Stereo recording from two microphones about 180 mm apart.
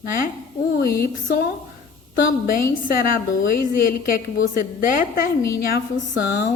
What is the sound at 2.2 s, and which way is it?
A woman's voice, 50° left (ahead or behind).